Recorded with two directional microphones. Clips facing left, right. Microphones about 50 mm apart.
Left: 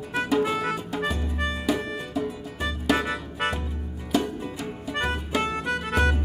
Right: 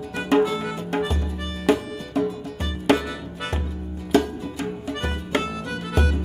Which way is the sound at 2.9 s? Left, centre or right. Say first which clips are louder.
Left 2 dB; left.